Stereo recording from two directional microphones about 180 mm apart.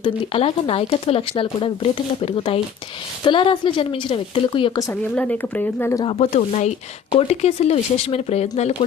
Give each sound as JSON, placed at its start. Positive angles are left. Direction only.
{"t": 0.0, "sound": "speech", "side_deg": 30}
{"t": 5.1, "sound": "speech", "side_deg": 10}
{"t": 6.1, "sound": "speech", "side_deg": 35}